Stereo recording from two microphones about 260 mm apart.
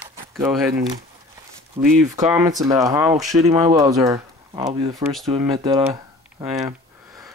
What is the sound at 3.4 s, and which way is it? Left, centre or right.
Speech, right.